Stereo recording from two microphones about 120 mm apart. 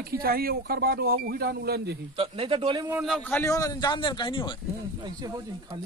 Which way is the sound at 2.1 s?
50° right (ahead or behind).